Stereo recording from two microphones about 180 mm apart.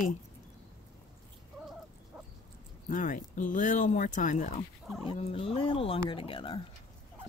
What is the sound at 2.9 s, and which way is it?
Speech, 45° left (ahead or behind).